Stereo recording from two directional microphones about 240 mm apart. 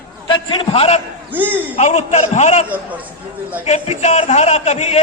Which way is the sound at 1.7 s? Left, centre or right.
Left.